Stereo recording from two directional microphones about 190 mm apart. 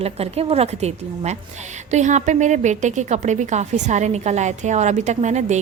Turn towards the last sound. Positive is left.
turn(degrees=-40)  # may be behind; listen again after turning